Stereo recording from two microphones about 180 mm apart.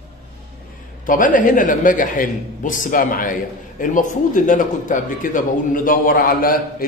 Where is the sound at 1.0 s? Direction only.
50° left (ahead or behind).